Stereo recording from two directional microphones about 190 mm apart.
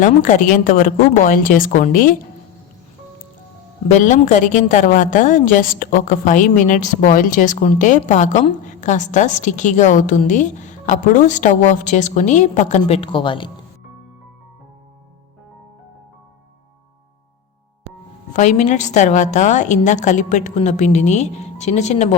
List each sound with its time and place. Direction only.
0.0 s a woman's voice: 45° left (ahead or behind)
3.8 s a woman's voice: 40° left (ahead or behind)
18.3 s a woman's voice: 40° left (ahead or behind)